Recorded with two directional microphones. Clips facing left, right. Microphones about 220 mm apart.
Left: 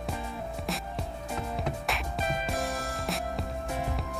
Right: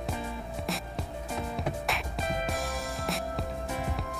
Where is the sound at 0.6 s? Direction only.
Centre (ahead or behind).